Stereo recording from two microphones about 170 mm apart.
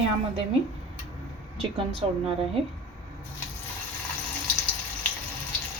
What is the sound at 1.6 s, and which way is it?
A woman's voice, 35° right (ahead or behind).